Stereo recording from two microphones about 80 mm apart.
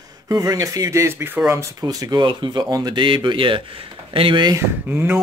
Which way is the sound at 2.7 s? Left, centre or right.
Right.